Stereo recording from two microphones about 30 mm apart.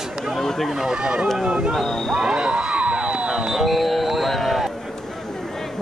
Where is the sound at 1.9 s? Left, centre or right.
Centre.